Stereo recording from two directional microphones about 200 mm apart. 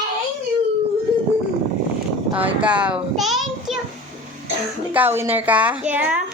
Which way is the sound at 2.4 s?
5° right (ahead or behind).